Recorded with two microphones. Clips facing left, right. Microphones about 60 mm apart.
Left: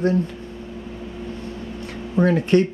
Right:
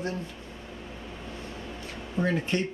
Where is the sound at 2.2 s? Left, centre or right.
Left.